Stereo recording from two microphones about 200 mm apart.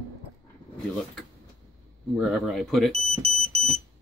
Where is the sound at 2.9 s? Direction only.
30° right (ahead or behind).